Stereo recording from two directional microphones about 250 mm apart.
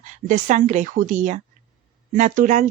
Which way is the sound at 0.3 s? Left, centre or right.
Right.